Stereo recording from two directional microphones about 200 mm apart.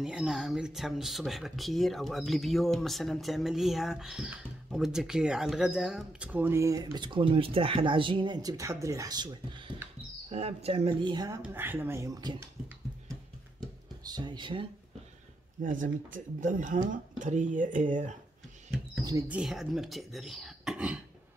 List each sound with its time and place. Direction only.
0.0 s speech: centre (ahead or behind); by 12.4 s 20° right (ahead or behind)
14.0 s speech: 20° right (ahead or behind)
15.6 s speech: 40° right (ahead or behind)
19.0 s speech: 10° right (ahead or behind)